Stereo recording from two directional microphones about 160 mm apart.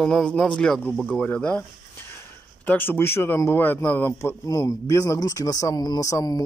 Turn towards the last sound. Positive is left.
turn(degrees=20)  # may be behind; listen again after turning